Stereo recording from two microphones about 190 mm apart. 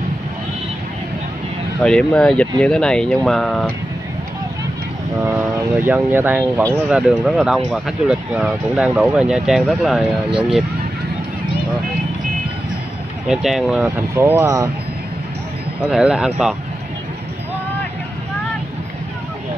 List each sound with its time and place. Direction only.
1.8 s speech: 5° left (ahead or behind)
5.2 s speech: 10° right (ahead or behind)
13.3 s speech: centre (ahead or behind)
14.1 s speech: 15° right (ahead or behind)
15.9 s speech: 5° right (ahead or behind)